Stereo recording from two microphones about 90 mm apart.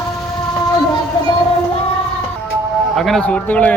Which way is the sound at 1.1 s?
55° left (ahead or behind).